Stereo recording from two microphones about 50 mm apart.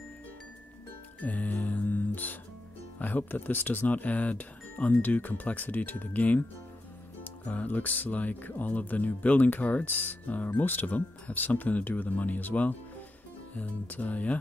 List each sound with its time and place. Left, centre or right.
1.2 s music: left
3.0 s speech: left